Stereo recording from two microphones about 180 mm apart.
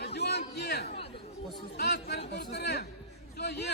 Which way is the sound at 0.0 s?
65° left (ahead or behind).